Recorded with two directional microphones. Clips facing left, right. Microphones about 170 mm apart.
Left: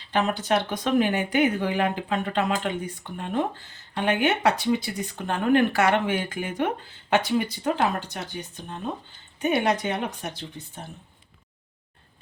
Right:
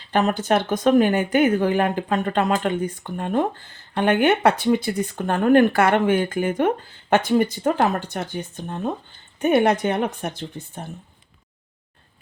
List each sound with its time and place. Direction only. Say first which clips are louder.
0.1 s speech: right 4 dB; 45° right (ahead or behind)